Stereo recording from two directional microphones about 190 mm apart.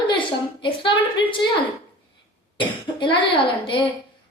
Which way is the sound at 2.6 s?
25° left (ahead or behind).